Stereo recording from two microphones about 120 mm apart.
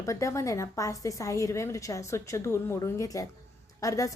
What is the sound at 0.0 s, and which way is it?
A woman's voice, 25° left (ahead or behind).